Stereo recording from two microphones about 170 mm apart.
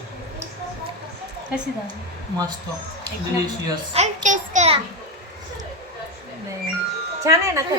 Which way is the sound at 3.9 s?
45° right (ahead or behind).